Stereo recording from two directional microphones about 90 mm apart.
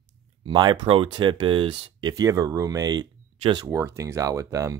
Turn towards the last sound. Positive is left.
turn(degrees=-35)  # may be behind; listen again after turning